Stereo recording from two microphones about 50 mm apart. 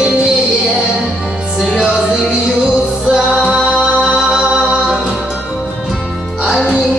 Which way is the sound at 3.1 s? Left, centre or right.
Centre.